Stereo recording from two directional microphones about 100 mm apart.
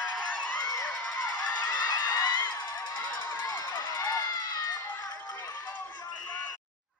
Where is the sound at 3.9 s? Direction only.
40° left (ahead or behind).